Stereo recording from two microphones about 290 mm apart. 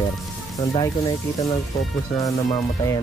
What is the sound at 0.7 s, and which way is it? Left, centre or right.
Speech, centre.